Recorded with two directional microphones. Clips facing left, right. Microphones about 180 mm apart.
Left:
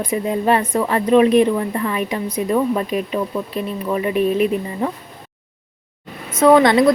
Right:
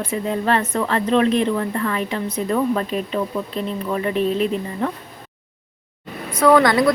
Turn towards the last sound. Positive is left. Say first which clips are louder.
# left 3 dB
turn(degrees=25)  # may be behind; listen again after turning